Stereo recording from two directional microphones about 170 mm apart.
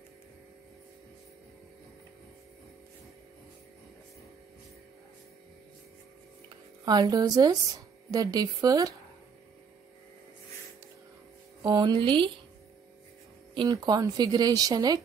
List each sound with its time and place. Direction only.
6.8 s a woman's voice: 20° right (ahead or behind)
11.6 s speech: 25° right (ahead or behind)
13.6 s speech: 25° right (ahead or behind)